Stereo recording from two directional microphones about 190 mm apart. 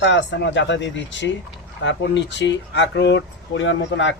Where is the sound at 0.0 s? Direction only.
70° left (ahead or behind).